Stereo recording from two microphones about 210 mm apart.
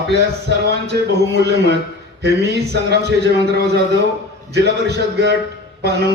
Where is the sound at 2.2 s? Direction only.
50° right (ahead or behind).